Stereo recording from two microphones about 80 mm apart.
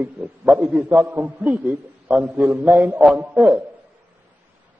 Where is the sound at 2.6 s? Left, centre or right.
Centre.